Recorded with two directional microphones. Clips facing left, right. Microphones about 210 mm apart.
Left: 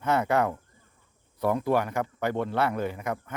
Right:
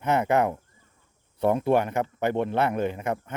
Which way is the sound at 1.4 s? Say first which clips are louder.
Right 3 dB; 25° right (ahead or behind).